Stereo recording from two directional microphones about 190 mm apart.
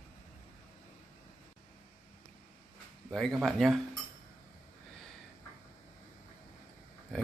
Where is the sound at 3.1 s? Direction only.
5° left (ahead or behind).